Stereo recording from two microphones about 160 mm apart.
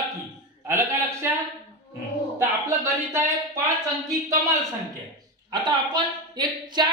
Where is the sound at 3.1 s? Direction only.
20° right (ahead or behind).